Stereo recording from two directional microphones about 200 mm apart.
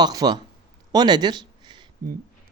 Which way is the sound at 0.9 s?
20° right (ahead or behind).